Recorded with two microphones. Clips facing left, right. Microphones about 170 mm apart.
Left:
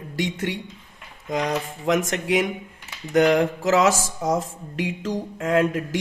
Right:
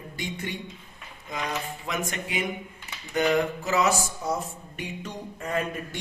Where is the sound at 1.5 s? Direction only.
90° left.